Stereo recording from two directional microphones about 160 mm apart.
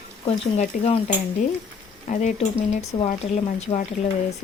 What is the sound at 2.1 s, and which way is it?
Speech, 50° left (ahead or behind).